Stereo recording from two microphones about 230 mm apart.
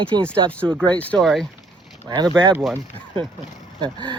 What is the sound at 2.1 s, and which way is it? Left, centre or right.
Speech, centre.